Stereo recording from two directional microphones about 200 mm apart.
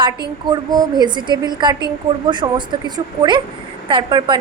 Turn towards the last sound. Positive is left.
turn(degrees=-25)  # may be behind; listen again after turning